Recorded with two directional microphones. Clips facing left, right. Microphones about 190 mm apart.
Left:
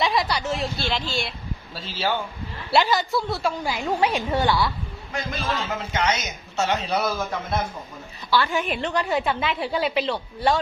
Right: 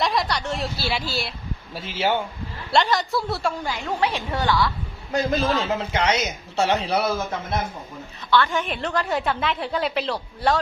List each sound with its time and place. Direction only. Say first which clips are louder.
0.0 s a sound: even; centre (ahead or behind)
1.7 s speech: right 3 dB; 20° right (ahead or behind)
2.7 s a woman's voice: even; centre (ahead or behind)
3.7 s a woman's voice: left 4 dB; 15° left (ahead or behind)
5.1 s a man's voice: right 7 dB; 35° right (ahead or behind)
8.5 s a woman's voice: left 1 dB; centre (ahead or behind)